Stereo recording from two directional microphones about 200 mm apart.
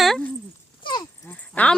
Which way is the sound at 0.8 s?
20° left (ahead or behind).